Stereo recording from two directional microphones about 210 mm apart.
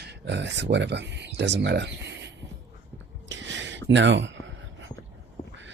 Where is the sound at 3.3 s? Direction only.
60° right (ahead or behind).